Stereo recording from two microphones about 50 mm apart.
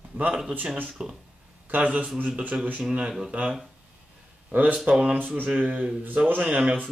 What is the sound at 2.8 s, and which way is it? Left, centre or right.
Speech, centre.